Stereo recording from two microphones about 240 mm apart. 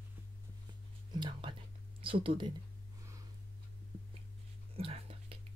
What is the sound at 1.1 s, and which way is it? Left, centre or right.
Whispering, centre.